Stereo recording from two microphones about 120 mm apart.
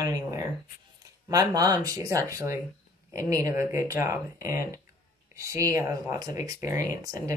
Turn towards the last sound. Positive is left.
turn(degrees=-30)  # may be behind; listen again after turning